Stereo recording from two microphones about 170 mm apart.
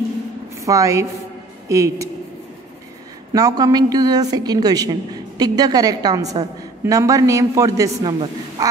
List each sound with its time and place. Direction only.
0.6 s a woman's voice: 20° right (ahead or behind)
3.3 s a woman's voice: 20° right (ahead or behind)